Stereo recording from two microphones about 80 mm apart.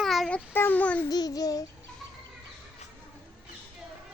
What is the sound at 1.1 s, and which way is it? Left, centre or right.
Child singing, left.